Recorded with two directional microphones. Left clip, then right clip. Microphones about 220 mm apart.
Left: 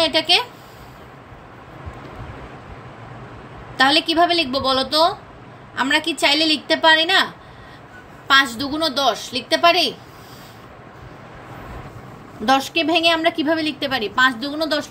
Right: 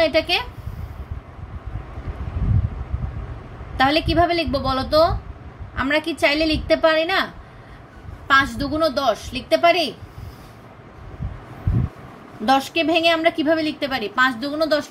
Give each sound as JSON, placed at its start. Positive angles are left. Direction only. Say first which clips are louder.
{"t": 0.0, "sound": "a woman's voice", "louder": "left 2 dB", "side_deg": -30}
{"t": 3.7, "sound": "a woman's voice", "louder": "left 2 dB", "side_deg": -30}
{"t": 8.3, "sound": "a woman's voice", "louder": "left 1 dB", "side_deg": -30}
{"t": 12.4, "sound": "a woman's voice", "louder": "left 1 dB", "side_deg": -25}